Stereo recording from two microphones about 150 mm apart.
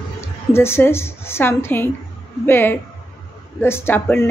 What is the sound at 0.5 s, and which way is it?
Speech, 15° left (ahead or behind).